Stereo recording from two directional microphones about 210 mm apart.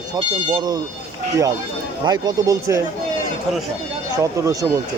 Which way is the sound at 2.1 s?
20° right (ahead or behind).